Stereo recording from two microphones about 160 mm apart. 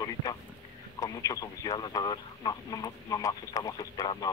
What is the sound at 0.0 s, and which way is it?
Vehicle, 25° left (ahead or behind).